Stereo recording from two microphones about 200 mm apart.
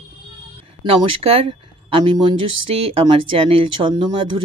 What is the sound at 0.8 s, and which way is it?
Speech, 30° right (ahead or behind).